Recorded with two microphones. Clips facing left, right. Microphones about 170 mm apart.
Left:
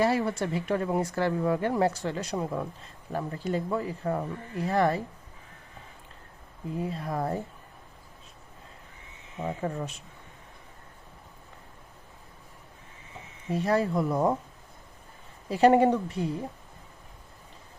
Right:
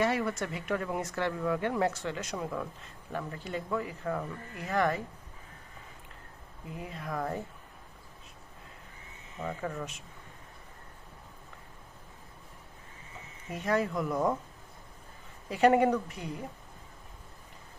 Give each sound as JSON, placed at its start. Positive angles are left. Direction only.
{"t": 0.0, "sound": "speech", "side_deg": 30}
{"t": 6.8, "sound": "speech", "side_deg": 30}
{"t": 9.4, "sound": "speech", "side_deg": 30}
{"t": 13.5, "sound": "speech", "side_deg": 35}
{"t": 15.4, "sound": "speech", "side_deg": 35}